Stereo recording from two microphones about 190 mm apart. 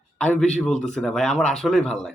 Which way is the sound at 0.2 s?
5° left (ahead or behind).